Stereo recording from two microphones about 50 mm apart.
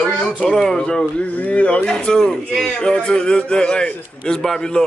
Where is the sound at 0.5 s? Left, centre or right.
Centre.